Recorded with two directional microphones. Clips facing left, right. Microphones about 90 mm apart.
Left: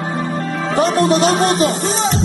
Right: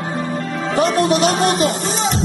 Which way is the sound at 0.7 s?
35° left (ahead or behind).